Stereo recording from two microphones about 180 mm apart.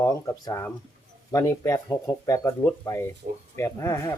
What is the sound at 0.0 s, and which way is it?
Speech, 15° left (ahead or behind).